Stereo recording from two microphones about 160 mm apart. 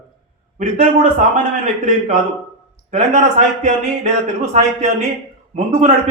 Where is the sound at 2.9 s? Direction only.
50° right (ahead or behind).